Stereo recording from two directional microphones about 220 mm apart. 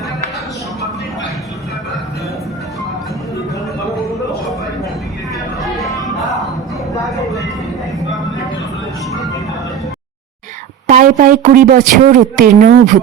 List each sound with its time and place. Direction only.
5.6 s music: centre (ahead or behind)
10.8 s speech: 35° right (ahead or behind)